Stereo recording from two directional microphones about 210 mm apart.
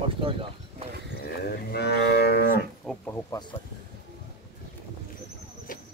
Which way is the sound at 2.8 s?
10° left (ahead or behind).